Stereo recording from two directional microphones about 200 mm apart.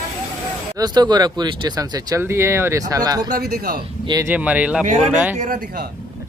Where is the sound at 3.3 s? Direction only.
50° right (ahead or behind).